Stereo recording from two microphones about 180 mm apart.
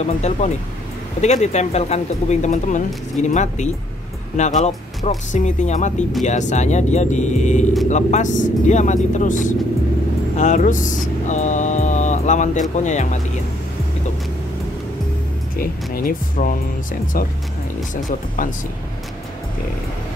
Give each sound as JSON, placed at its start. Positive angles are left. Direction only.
{"t": 0.0, "sound": "speech", "side_deg": 40}
{"t": 15.5, "sound": "speech", "side_deg": 50}